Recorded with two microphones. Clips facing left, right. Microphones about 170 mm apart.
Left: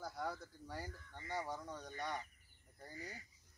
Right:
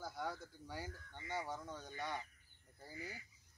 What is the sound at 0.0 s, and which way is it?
Speech, centre (ahead or behind).